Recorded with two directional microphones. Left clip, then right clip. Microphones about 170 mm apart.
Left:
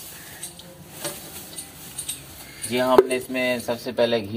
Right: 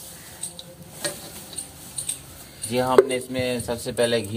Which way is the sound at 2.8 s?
20° left (ahead or behind).